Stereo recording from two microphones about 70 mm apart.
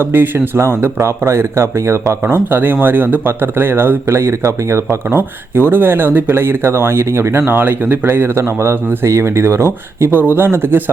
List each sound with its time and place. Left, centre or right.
0.0 s speech: right
9.0 s speech: right